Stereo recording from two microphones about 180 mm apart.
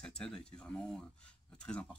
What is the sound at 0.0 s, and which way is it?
Speech, 5° left (ahead or behind).